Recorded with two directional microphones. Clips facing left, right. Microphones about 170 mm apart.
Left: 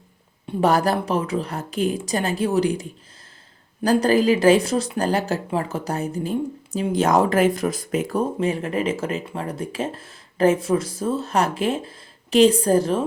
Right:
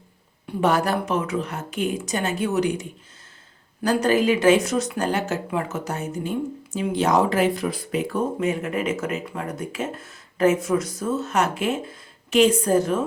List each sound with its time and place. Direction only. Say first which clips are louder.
0.6 s speech: left 2 dB; 35° left (ahead or behind)
3.8 s speech: left 2 dB; 35° left (ahead or behind)
6.7 s speech: left 2 dB; 45° left (ahead or behind)
8.4 s speech: left 1 dB; 30° left (ahead or behind)